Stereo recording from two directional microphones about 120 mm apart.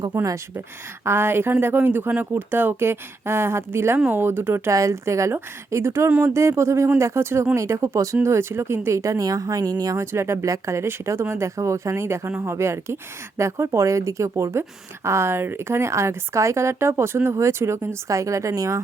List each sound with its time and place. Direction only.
0.2 s speech: 20° right (ahead or behind)